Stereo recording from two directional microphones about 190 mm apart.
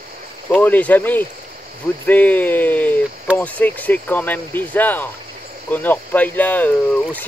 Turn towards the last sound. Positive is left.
turn(degrees=10)  # may be behind; listen again after turning